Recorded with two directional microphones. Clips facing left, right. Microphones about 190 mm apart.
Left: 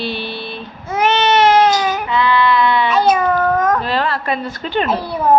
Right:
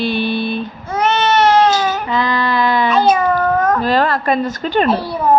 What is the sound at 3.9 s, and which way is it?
A man's voice, 45° right (ahead or behind).